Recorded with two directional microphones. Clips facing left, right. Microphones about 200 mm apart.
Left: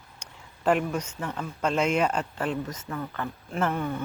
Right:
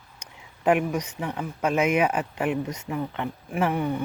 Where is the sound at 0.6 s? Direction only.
10° right (ahead or behind).